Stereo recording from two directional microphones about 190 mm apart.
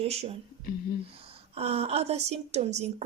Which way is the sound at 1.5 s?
30° right (ahead or behind).